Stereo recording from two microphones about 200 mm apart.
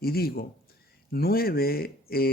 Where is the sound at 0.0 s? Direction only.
50° left (ahead or behind).